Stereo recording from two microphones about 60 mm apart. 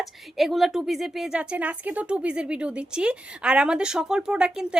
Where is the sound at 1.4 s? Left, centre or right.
Right.